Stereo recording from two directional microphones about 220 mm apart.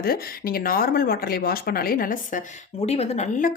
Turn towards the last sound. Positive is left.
turn(degrees=35)  # may be behind; listen again after turning